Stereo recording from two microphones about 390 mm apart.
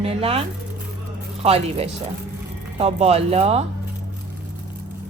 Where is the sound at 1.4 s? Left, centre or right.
Centre.